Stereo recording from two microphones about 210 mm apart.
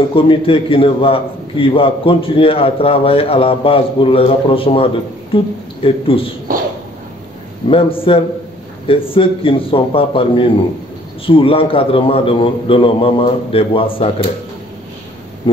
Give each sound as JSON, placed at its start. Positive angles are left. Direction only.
{"t": 0.1, "sound": "a man's voice", "side_deg": 25}
{"t": 7.6, "sound": "a man's voice", "side_deg": 25}
{"t": 15.5, "sound": "a sound", "side_deg": 20}